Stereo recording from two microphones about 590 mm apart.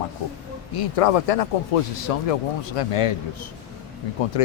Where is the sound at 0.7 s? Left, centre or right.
Left.